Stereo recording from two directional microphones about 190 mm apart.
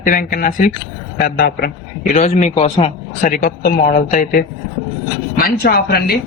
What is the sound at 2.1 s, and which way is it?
Speech, 35° left (ahead or behind).